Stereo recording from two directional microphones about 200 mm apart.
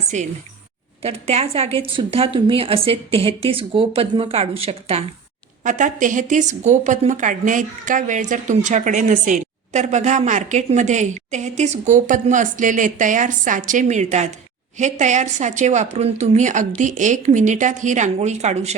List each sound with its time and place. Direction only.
0.1 s speech: 35° right (ahead or behind)